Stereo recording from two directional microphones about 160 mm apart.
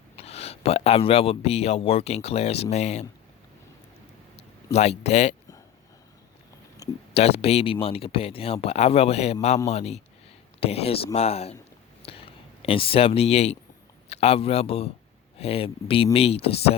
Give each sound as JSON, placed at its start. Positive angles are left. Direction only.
{"t": 0.2, "sound": "speech", "side_deg": 40}
{"t": 4.4, "sound": "speech", "side_deg": 40}
{"t": 7.1, "sound": "speech", "side_deg": 40}